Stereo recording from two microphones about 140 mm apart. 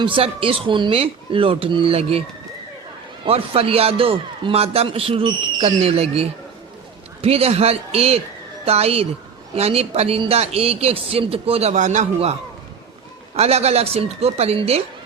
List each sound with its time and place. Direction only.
0.0 s speech: 40° right (ahead or behind)
3.2 s a man's voice: 45° right (ahead or behind)